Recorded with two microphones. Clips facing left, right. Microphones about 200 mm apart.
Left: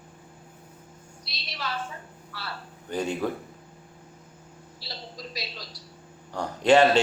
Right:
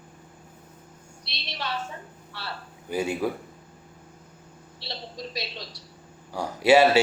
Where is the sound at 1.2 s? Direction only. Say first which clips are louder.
Right 1 dB; 25° right (ahead or behind).